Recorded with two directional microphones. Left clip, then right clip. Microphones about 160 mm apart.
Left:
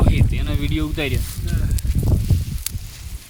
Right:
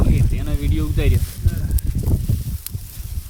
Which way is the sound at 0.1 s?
30° left (ahead or behind).